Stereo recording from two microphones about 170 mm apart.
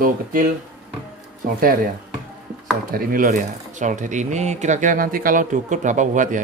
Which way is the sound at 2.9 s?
55° right (ahead or behind).